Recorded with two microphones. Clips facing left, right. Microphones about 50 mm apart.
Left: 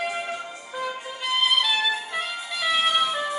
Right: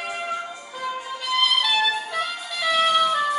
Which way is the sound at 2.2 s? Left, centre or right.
Centre.